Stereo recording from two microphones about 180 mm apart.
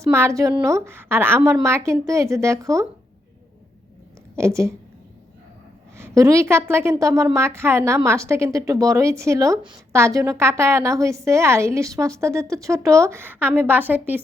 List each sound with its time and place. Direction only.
0.0 s a woman's voice: 15° right (ahead or behind)
4.4 s a woman's voice: 15° right (ahead or behind)
6.0 s a woman's voice: 15° right (ahead or behind)